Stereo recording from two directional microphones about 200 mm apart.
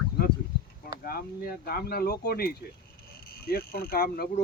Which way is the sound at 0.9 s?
50° left (ahead or behind).